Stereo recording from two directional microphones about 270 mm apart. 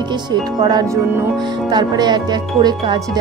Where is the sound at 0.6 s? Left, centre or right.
Centre.